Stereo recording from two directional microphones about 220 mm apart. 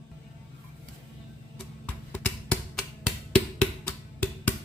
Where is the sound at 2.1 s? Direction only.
5° left (ahead or behind).